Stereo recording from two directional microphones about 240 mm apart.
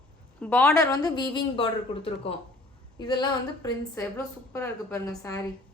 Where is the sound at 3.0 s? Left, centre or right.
Centre.